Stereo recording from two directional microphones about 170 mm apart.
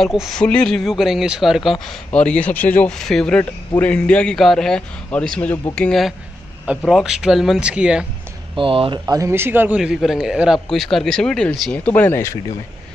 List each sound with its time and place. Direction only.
0.0 s speech: centre (ahead or behind)
8.5 s speech: 30° right (ahead or behind)
9.0 s speech: 20° right (ahead or behind); by 12.4 s 15° left (ahead or behind)